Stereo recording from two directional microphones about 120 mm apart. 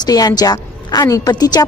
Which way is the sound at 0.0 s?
35° left (ahead or behind).